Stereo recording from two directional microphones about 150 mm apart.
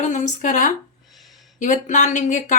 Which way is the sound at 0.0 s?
55° left (ahead or behind).